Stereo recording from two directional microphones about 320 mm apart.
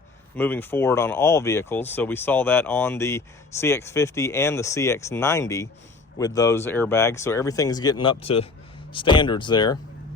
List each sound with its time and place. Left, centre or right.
0.3 s speech: centre